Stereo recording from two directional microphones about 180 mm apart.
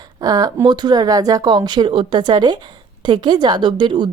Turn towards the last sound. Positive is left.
turn(degrees=-25)  # may be behind; listen again after turning